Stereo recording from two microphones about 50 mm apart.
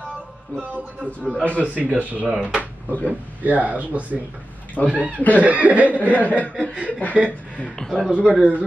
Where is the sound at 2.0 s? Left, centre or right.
Right.